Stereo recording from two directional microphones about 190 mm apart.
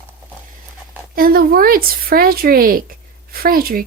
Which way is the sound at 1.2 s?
50° right (ahead or behind).